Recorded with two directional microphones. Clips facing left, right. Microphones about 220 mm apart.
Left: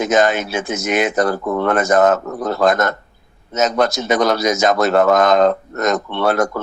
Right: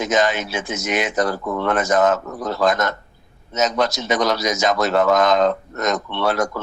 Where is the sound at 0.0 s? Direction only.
55° left (ahead or behind).